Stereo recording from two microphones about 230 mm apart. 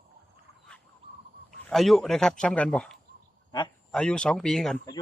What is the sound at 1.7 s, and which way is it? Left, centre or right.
Speech, centre.